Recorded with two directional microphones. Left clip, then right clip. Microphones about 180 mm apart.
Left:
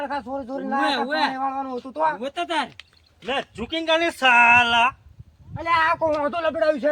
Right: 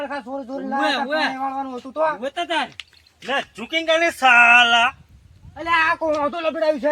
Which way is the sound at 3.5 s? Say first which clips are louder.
Right 2 dB; 35° left (ahead or behind).